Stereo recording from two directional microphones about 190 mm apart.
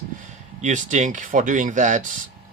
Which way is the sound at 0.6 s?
40° right (ahead or behind).